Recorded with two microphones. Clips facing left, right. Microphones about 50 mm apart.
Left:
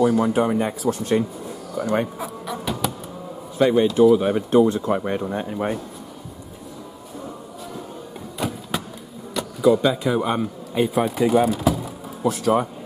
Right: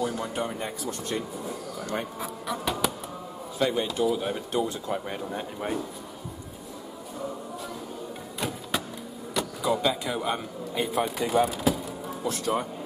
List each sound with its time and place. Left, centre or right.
0.1 s speech: centre
0.8 s speech: left
1.8 s speech: centre
2.1 s speech: centre
3.5 s speech: centre
8.4 s a sound: centre
9.3 s power windows: centre
10.1 s speech: centre